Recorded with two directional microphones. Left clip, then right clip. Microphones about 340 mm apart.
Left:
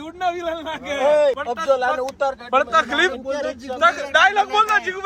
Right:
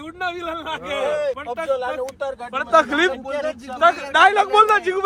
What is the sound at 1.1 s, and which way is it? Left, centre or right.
Speech, left.